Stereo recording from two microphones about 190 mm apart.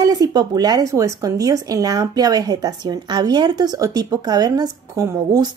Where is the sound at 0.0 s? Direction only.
20° right (ahead or behind).